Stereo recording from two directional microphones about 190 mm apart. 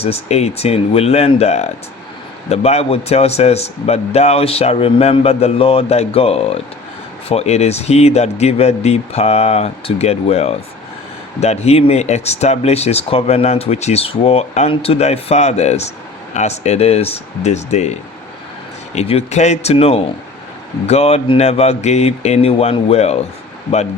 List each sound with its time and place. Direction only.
0.0 s speech: 35° left (ahead or behind)
18.9 s speech: 35° left (ahead or behind)